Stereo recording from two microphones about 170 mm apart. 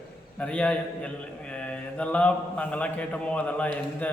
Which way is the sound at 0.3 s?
5° left (ahead or behind).